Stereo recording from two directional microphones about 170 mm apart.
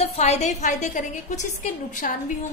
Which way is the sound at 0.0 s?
40° left (ahead or behind).